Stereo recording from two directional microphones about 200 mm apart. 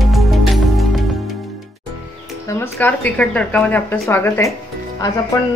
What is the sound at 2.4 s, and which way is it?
A woman's voice, 10° left (ahead or behind).